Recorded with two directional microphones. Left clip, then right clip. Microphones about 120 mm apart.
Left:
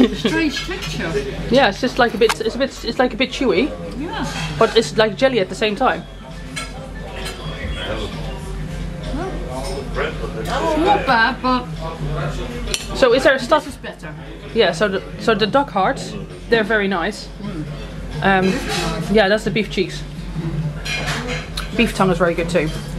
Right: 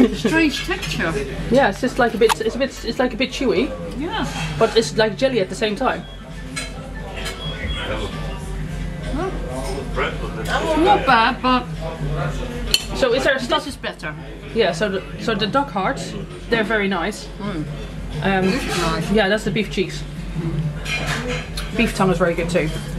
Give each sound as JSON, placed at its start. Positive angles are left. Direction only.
{"t": 0.2, "sound": "speech", "side_deg": -10}
{"t": 1.5, "sound": "a woman's voice", "side_deg": 15}
{"t": 9.1, "sound": "a sound", "side_deg": 15}
{"t": 10.8, "sound": "a woman's voice", "side_deg": 10}
{"t": 12.9, "sound": "a woman's voice", "side_deg": 20}
{"t": 18.2, "sound": "a woman's voice", "side_deg": 15}
{"t": 20.9, "sound": "a woman's voice", "side_deg": 15}